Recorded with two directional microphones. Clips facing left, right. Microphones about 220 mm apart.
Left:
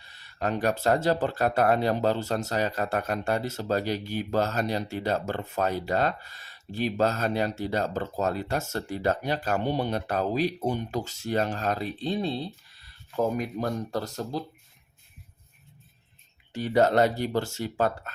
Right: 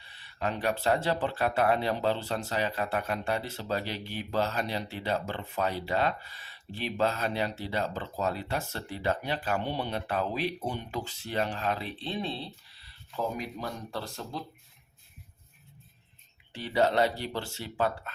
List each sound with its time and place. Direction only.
0.0 s speech: 45° left (ahead or behind)
16.5 s speech: 45° left (ahead or behind)